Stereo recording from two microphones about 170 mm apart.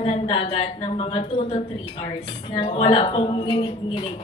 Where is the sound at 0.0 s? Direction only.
35° left (ahead or behind).